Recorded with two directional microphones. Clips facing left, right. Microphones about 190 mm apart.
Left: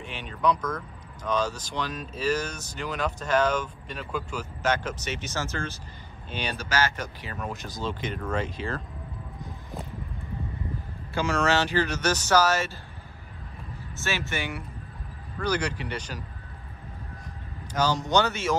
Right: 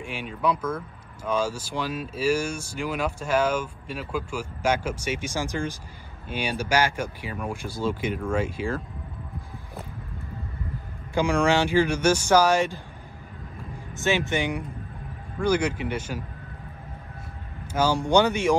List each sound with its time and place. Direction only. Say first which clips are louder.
0.0 s speech: even; 10° right (ahead or behind)
11.1 s speech: right 3 dB; 15° right (ahead or behind)
14.0 s speech: right 7 dB; 15° right (ahead or behind)
17.7 s speech: right 3 dB; 10° right (ahead or behind)